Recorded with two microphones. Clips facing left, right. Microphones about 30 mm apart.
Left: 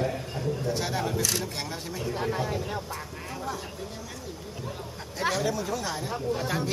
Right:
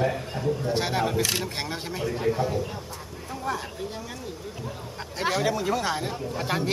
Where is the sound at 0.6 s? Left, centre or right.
Right.